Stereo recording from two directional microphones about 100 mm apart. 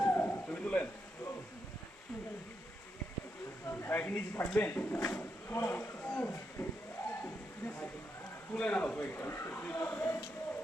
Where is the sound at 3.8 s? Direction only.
20° left (ahead or behind).